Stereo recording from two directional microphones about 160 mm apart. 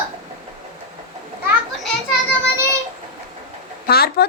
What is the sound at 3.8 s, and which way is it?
Speech, 75° left (ahead or behind).